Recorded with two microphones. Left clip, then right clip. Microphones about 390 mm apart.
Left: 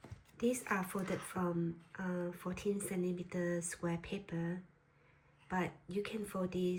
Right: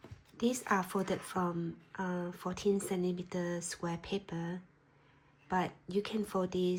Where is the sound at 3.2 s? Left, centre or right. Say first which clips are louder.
Right 1 dB; centre.